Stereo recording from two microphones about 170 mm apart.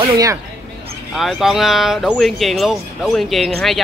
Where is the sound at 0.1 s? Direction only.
20° right (ahead or behind).